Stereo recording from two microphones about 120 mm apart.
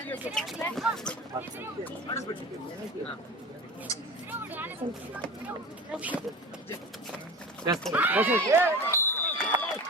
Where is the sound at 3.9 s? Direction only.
25° left (ahead or behind).